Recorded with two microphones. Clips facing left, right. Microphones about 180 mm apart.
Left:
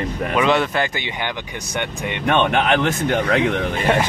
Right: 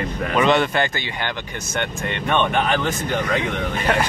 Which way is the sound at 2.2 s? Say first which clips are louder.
Left 3 dB; 65° left (ahead or behind).